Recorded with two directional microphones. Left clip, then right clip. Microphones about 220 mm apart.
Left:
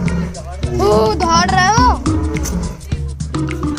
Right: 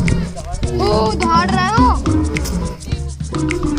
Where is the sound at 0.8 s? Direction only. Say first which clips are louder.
Left 3 dB; 30° left (ahead or behind).